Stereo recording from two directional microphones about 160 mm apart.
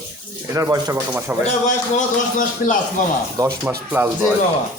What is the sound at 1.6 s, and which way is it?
Speech, 50° left (ahead or behind).